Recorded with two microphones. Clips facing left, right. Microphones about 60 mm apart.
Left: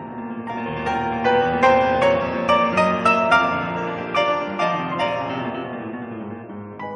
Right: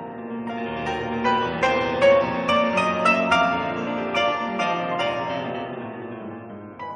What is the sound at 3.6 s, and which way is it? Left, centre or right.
Music, centre.